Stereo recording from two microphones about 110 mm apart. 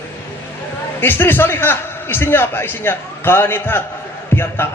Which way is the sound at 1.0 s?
20° left (ahead or behind).